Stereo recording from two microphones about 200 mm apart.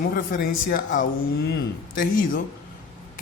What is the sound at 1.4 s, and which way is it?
Speech, 55° left (ahead or behind).